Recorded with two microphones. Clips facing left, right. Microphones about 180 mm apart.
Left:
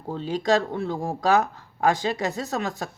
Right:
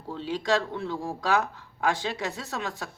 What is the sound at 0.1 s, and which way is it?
A woman's voice, 45° left (ahead or behind).